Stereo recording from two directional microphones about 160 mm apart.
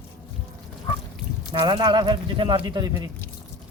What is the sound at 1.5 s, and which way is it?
Speech, 30° right (ahead or behind).